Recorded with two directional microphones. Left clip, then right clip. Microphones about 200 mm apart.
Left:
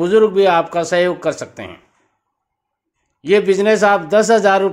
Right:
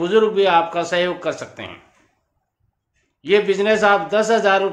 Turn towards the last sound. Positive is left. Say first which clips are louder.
# left 4 dB
turn(degrees=50)  # may be behind; listen again after turning